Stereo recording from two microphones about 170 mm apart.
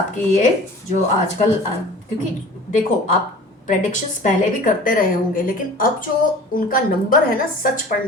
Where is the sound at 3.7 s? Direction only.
50° left (ahead or behind).